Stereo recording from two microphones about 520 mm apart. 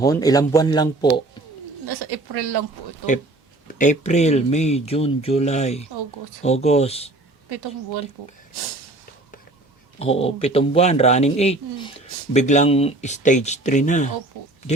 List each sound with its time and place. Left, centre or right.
0.0 s speech: centre
1.9 s speech: right
3.8 s speech: centre
10.0 s speech: centre